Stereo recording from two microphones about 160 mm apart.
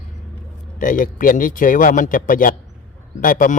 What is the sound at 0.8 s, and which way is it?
A man's voice, 55° left (ahead or behind).